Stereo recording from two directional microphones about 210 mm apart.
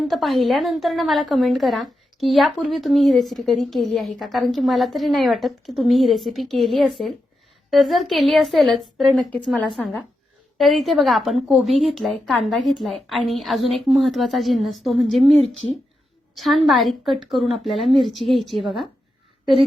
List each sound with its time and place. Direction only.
0.1 s a woman's voice: centre (ahead or behind)
15.4 s a woman's voice: 65° left (ahead or behind)
16.3 s a woman's voice: centre (ahead or behind)